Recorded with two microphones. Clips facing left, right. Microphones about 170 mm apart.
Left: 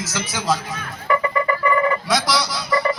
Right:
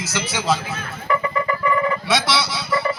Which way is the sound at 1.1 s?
60° left (ahead or behind).